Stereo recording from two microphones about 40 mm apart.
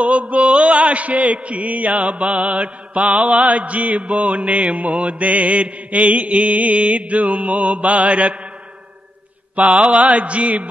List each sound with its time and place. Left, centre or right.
0.0 s mantra: right
9.6 s mantra: right